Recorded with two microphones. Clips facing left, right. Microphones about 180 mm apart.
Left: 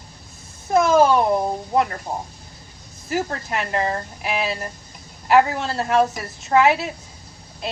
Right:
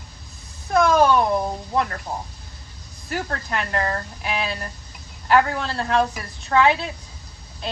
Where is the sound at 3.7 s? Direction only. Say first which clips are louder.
Left 3 dB; 20° left (ahead or behind).